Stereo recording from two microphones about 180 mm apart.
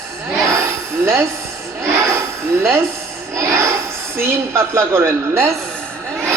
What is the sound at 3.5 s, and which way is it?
A woman's voice, 15° right (ahead or behind).